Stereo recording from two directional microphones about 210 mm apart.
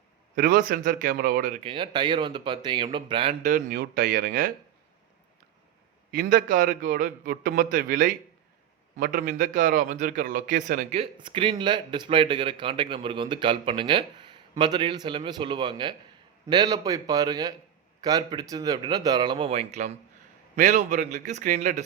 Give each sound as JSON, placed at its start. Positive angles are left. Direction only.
{"t": 0.3, "sound": "speech", "side_deg": -40}
{"t": 1.6, "sound": "a man's voice", "side_deg": -25}
{"t": 3.5, "sound": "speech", "side_deg": -45}
{"t": 6.1, "sound": "a man's voice", "side_deg": -40}